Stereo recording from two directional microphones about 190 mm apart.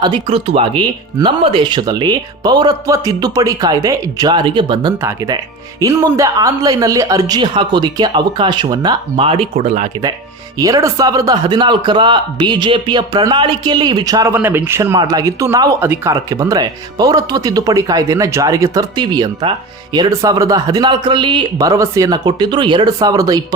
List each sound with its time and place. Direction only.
0.0 s speech: 25° right (ahead or behind)
10.6 s speech: 15° right (ahead or behind)